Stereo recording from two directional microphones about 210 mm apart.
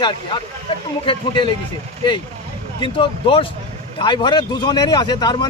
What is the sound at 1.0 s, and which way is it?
Speech, 20° left (ahead or behind).